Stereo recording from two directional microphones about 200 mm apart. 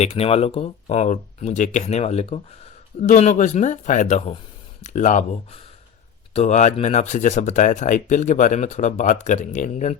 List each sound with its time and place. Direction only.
0.0 s speech: 30° left (ahead or behind)